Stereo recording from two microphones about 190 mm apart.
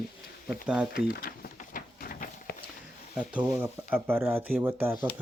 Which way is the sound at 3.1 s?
10° right (ahead or behind).